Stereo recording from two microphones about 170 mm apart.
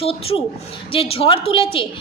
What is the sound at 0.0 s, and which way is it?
A woman's voice, 35° left (ahead or behind).